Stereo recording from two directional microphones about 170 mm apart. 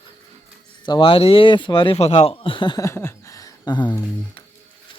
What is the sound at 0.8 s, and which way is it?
Speech, 30° left (ahead or behind).